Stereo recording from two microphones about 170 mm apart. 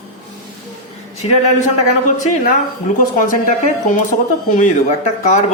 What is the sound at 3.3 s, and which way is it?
Speech, 50° left (ahead or behind).